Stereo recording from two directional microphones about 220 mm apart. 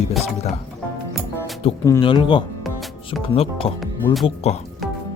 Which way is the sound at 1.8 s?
15° left (ahead or behind).